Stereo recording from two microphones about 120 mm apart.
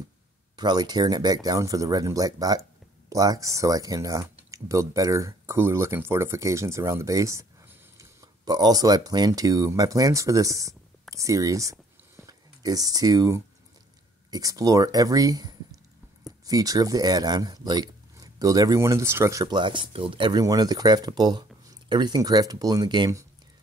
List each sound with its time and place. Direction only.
0.6 s speech: 35° right (ahead or behind)
19.4 s speech: 40° right (ahead or behind)